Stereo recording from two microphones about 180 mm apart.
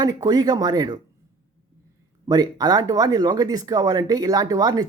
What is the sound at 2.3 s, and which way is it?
Speech, 20° right (ahead or behind).